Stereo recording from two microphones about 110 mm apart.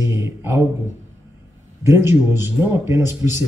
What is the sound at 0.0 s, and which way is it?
Speech, 25° right (ahead or behind).